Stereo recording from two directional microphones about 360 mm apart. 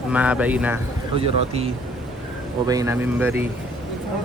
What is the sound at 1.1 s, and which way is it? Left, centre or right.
Speech, centre.